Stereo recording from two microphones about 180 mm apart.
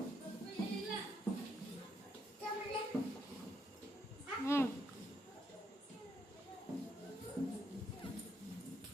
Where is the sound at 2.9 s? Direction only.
10° left (ahead or behind).